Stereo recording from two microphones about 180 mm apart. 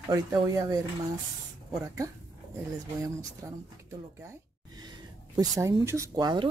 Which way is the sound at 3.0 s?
20° right (ahead or behind).